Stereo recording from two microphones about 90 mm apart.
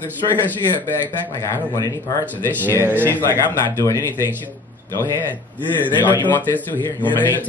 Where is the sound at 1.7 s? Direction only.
40° left (ahead or behind).